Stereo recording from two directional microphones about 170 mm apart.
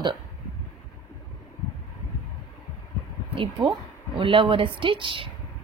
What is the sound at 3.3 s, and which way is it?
A woman's voice, 30° right (ahead or behind).